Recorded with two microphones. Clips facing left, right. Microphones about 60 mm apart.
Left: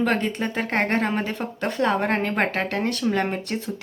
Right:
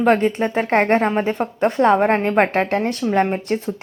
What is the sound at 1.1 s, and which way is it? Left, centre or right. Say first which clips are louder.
Speech: right 6 dB; centre.